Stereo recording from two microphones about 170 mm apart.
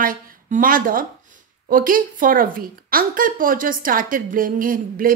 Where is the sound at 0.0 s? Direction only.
55° right (ahead or behind).